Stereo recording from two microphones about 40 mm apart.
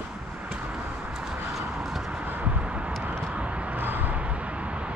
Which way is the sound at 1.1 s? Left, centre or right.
Centre.